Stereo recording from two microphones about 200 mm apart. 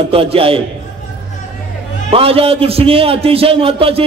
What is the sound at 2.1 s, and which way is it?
A man's voice, 30° right (ahead or behind).